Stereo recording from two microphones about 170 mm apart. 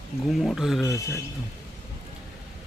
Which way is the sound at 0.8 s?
15° left (ahead or behind).